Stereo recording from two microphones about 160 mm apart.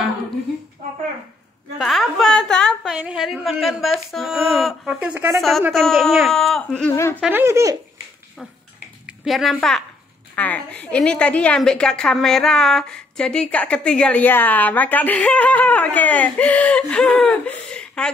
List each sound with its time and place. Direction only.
1.8 s a woman's voice: centre (ahead or behind)
5.7 s a woman's voice: centre (ahead or behind)
7.2 s speech: 10° right (ahead or behind)
9.0 s a woman's voice: centre (ahead or behind)